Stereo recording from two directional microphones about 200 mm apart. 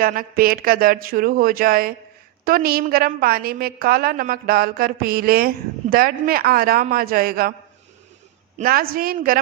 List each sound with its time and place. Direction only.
0.0 s a woman's voice: 45° right (ahead or behind)
8.5 s a woman's voice: 45° right (ahead or behind)